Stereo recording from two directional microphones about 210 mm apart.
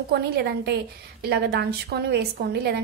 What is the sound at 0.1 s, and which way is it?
A woman's voice, 50° right (ahead or behind).